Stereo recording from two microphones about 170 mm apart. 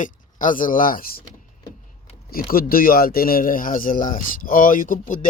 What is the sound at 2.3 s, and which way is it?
Speech, 60° left (ahead or behind).